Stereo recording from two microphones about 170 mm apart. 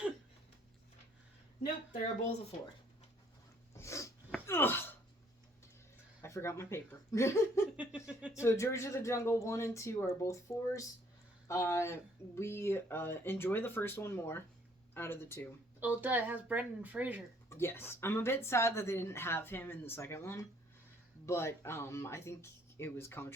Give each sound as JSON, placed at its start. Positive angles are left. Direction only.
{"t": 3.8, "sound": "snort", "side_deg": 15}
{"t": 4.4, "sound": "wail", "side_deg": 15}
{"t": 6.2, "sound": "a woman's voice", "side_deg": 15}
{"t": 7.8, "sound": "a woman's voice", "side_deg": -5}
{"t": 8.4, "sound": "a woman's voice", "side_deg": 15}
{"t": 15.8, "sound": "a woman's voice", "side_deg": -10}
{"t": 17.5, "sound": "a woman's voice", "side_deg": 15}